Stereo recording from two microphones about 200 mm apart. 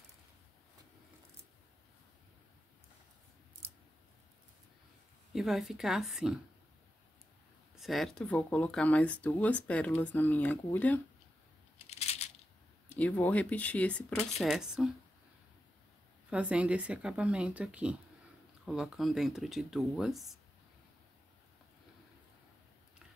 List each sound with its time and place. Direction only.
5.3 s speech: centre (ahead or behind)
7.7 s speech: centre (ahead or behind)
12.0 s coin: 30° left (ahead or behind)
12.8 s speech: 5° left (ahead or behind)
16.3 s speech: 5° right (ahead or behind)